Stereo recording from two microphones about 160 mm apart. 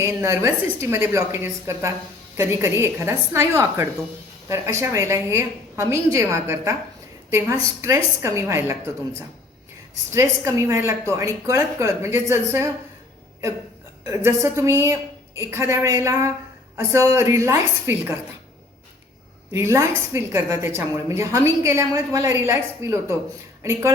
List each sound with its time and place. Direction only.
0.0 s a woman's voice: 20° right (ahead or behind)
14.3 s a woman's voice: 15° right (ahead or behind)
19.5 s a woman's voice: 20° right (ahead or behind)